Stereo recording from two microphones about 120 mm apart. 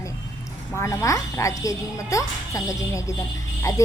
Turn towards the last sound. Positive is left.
turn(degrees=25)  # may be behind; listen again after turning